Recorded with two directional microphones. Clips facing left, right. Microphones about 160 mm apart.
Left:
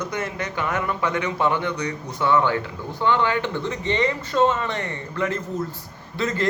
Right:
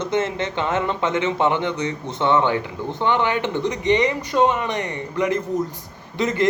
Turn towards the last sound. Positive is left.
turn(degrees=-20)  # may be behind; listen again after turning